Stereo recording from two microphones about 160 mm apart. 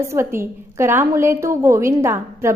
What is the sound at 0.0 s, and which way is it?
A woman's voice, 15° right (ahead or behind).